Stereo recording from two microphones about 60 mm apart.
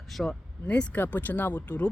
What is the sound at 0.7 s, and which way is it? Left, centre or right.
Speech, centre.